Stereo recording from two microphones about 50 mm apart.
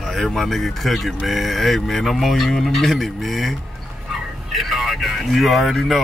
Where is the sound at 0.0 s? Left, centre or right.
Centre.